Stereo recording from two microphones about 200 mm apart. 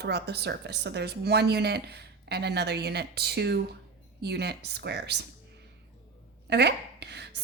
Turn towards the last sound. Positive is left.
turn(degrees=-55)  # may be behind; listen again after turning